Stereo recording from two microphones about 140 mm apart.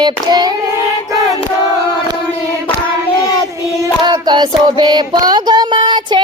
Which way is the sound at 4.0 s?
30° right (ahead or behind).